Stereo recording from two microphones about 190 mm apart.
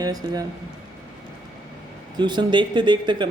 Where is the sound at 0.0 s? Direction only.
20° right (ahead or behind).